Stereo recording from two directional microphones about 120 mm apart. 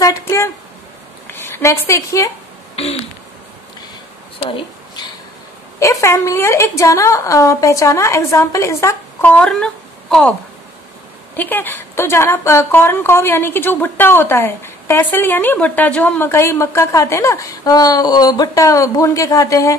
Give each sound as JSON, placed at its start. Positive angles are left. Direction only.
{"t": 0.0, "sound": "a woman's voice", "side_deg": 25}
{"t": 2.7, "sound": "a sound", "side_deg": 60}
{"t": 4.4, "sound": "a sound", "side_deg": 40}
{"t": 5.8, "sound": "a woman's voice", "side_deg": 25}
{"t": 9.3, "sound": "speech", "side_deg": 5}
{"t": 11.3, "sound": "a woman's voice", "side_deg": 15}